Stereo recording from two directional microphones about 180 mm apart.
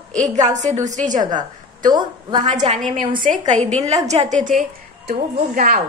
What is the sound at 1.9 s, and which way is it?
Speech, 25° right (ahead or behind).